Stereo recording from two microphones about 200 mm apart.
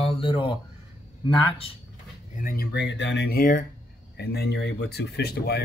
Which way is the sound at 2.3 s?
45° left (ahead or behind).